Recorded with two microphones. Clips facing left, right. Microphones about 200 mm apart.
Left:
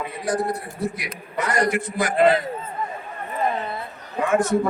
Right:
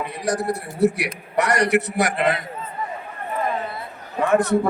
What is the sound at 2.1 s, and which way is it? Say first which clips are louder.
Speech: left 9 dB; 35° left (ahead or behind).